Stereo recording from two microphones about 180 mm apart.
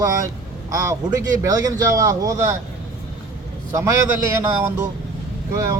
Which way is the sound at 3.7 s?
15° right (ahead or behind).